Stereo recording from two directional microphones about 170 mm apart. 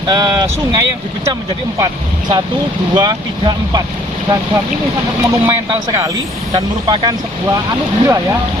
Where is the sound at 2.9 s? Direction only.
25° right (ahead or behind).